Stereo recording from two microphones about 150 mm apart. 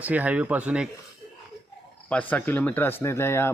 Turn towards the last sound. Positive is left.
turn(degrees=15)  # may be behind; listen again after turning